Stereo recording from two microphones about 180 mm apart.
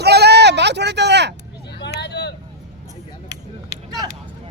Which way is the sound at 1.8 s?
70° left (ahead or behind).